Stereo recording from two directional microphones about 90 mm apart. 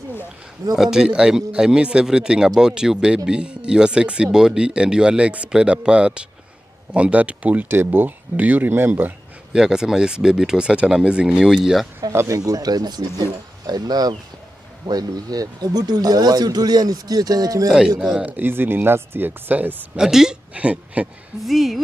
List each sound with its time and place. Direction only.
0.7 s speech: 5° right (ahead or behind); by 9.1 s 20° right (ahead or behind)
9.5 s speech: 10° right (ahead or behind)
12.1 s speech: 35° right (ahead or behind)
17.6 s speech: 10° right (ahead or behind)
20.0 s speech: 5° right (ahead or behind)
21.4 s speech: centre (ahead or behind)